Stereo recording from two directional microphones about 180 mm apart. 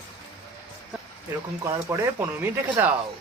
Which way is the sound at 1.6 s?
20° right (ahead or behind).